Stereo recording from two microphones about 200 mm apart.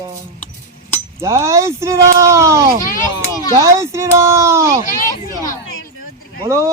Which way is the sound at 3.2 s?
15° left (ahead or behind).